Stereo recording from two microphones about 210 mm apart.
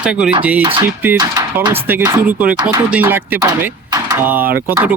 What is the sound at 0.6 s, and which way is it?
Speech, 25° right (ahead or behind).